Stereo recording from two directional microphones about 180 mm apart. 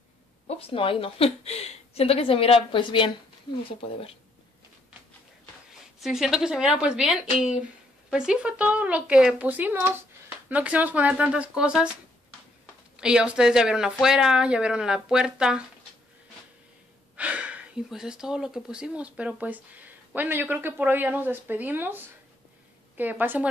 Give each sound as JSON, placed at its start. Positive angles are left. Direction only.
{"t": 0.5, "sound": "a woman's voice", "side_deg": 30}
{"t": 5.9, "sound": "speech", "side_deg": 0}
{"t": 12.9, "sound": "speech", "side_deg": -5}
{"t": 17.2, "sound": "speech", "side_deg": -5}